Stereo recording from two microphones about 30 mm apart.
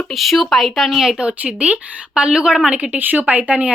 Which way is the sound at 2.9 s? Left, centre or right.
Right.